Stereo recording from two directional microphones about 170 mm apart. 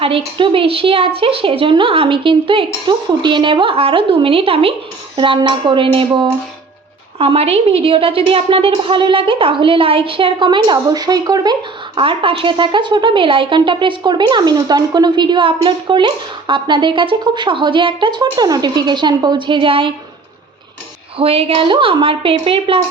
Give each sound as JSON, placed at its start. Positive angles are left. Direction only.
{"t": 0.0, "sound": "a woman's voice", "side_deg": -30}
{"t": 11.9, "sound": "speech", "side_deg": -30}
{"t": 21.2, "sound": "a woman's voice", "side_deg": -35}